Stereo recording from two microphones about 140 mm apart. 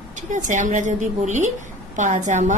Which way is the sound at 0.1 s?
65° right (ahead or behind).